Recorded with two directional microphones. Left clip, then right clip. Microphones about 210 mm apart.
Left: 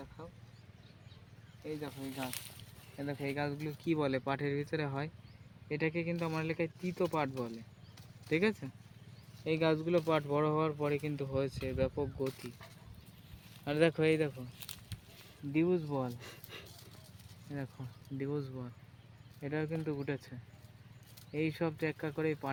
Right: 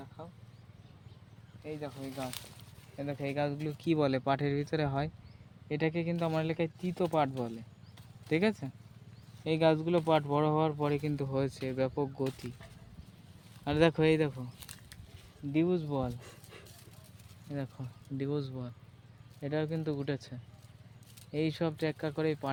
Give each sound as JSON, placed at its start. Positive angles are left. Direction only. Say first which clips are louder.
{"t": 1.8, "sound": "speech", "louder": "right 2 dB", "side_deg": -20}
{"t": 3.0, "sound": "speech", "louder": "right 3 dB", "side_deg": -40}
{"t": 13.7, "sound": "speech", "louder": "right 3 dB", "side_deg": -50}
{"t": 15.5, "sound": "speech", "louder": "right 1 dB", "side_deg": -40}
{"t": 16.2, "sound": "a sound", "louder": "left 3 dB", "side_deg": 0}
{"t": 17.5, "sound": "speech", "louder": "right 4 dB", "side_deg": -40}
{"t": 21.3, "sound": "speech", "louder": "right 2 dB", "side_deg": -40}